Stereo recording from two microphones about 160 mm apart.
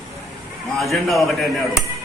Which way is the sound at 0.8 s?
Centre (ahead or behind).